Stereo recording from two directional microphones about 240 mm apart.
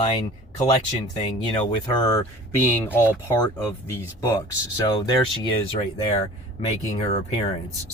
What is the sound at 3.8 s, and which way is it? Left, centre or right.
Speech, centre.